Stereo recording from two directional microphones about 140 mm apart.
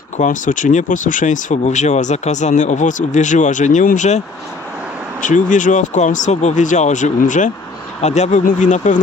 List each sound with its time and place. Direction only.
0.2 s speech: 65° left (ahead or behind)
5.2 s speech: 65° left (ahead or behind)
8.0 s speech: 55° left (ahead or behind)